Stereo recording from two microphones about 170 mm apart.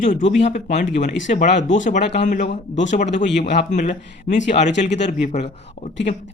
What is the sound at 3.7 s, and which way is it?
Speech, 45° left (ahead or behind).